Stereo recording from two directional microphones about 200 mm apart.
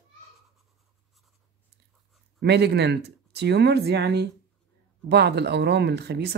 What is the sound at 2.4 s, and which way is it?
Speech, 55° right (ahead or behind).